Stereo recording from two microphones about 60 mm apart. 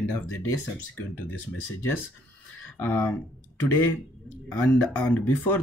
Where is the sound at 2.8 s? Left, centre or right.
Left.